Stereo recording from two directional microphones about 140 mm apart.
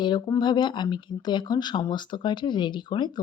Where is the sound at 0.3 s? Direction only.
35° left (ahead or behind).